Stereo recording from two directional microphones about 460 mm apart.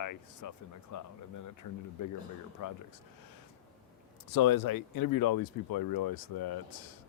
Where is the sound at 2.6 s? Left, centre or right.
Left.